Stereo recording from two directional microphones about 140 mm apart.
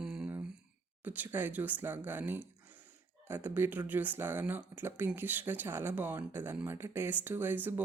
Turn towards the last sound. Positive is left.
turn(degrees=-15)  # may be behind; listen again after turning